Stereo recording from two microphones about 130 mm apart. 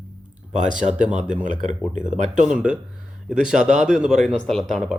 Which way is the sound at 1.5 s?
75° right (ahead or behind).